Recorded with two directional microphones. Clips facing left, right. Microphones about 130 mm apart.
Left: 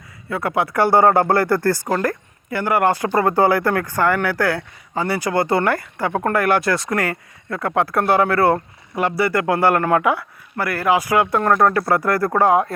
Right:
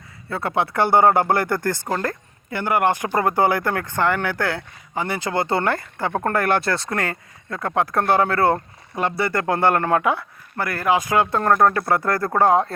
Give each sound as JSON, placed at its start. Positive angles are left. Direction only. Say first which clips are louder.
{"t": 0.3, "sound": "speech", "louder": "left 2 dB", "side_deg": -25}